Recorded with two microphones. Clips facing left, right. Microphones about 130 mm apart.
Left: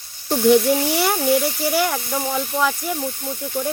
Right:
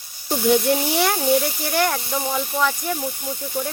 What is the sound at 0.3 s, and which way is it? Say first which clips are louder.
Speech: left 3 dB; centre (ahead or behind).